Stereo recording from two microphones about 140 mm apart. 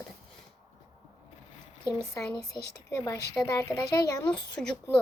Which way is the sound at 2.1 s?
25° left (ahead or behind).